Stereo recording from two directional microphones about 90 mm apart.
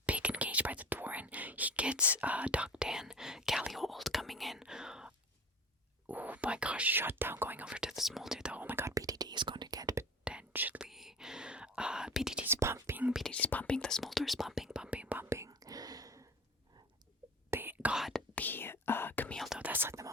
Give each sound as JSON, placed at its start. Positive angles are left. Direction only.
{"t": 0.0, "sound": "whispering", "side_deg": -15}
{"t": 6.1, "sound": "speech", "side_deg": -20}
{"t": 9.0, "sound": "whispering", "side_deg": -45}
{"t": 10.5, "sound": "whispering", "side_deg": -20}
{"t": 10.8, "sound": "whispering", "side_deg": -5}
{"t": 12.5, "sound": "whispering", "side_deg": -30}
{"t": 13.3, "sound": "whispering", "side_deg": 20}
{"t": 15.2, "sound": "whispering", "side_deg": -30}
{"t": 17.5, "sound": "whispering", "side_deg": -25}
{"t": 17.9, "sound": "whispering", "side_deg": 0}
{"t": 18.3, "sound": "whispering", "side_deg": 20}
{"t": 19.5, "sound": "whispering", "side_deg": -15}